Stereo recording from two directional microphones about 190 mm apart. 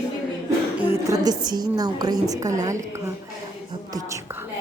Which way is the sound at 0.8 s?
15° right (ahead or behind).